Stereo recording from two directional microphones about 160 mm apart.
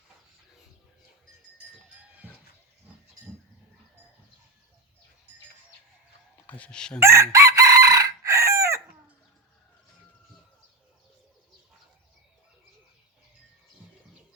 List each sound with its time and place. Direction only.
6.5 s speech: 5° left (ahead or behind)
7.0 s chicken: 20° right (ahead or behind)